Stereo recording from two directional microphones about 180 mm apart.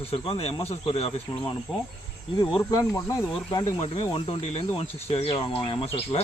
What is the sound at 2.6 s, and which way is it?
Speech, 20° left (ahead or behind).